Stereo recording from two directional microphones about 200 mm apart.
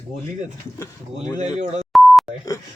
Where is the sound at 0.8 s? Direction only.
20° left (ahead or behind).